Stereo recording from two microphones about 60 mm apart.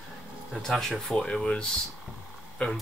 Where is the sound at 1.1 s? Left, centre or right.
Centre.